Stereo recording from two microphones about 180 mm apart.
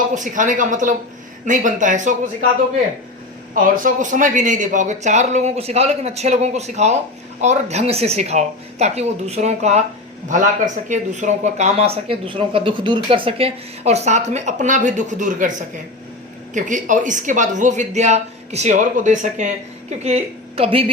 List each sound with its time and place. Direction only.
0.1 s speech: 45° right (ahead or behind)
3.5 s speech: 50° right (ahead or behind)
16.6 s a woman's voice: 45° right (ahead or behind)